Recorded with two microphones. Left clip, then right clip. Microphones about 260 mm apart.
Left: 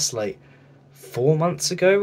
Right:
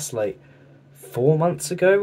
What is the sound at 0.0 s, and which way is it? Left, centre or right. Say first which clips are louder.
Speech: even; centre.